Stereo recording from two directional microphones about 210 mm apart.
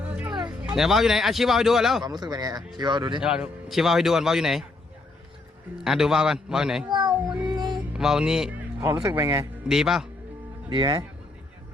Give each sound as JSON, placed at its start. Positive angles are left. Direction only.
{"t": 0.0, "sound": "a sound", "side_deg": -5}
{"t": 0.3, "sound": "a sound", "side_deg": -20}
{"t": 0.6, "sound": "speech", "side_deg": -5}
{"t": 2.0, "sound": "speech", "side_deg": -20}
{"t": 3.2, "sound": "speech", "side_deg": -5}
{"t": 5.7, "sound": "speech", "side_deg": 0}
{"t": 7.4, "sound": "music", "side_deg": -20}
{"t": 7.9, "sound": "speech", "side_deg": 0}
{"t": 9.0, "sound": "speech", "side_deg": -15}
{"t": 10.7, "sound": "speech", "side_deg": -20}